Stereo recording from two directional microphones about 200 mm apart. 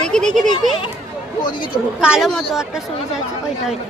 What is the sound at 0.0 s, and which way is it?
Speech, 5° left (ahead or behind).